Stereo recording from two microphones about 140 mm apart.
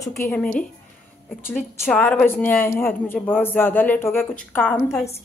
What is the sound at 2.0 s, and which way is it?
A man's voice, 10° left (ahead or behind).